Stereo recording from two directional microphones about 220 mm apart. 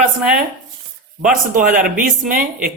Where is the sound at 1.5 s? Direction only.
40° right (ahead or behind).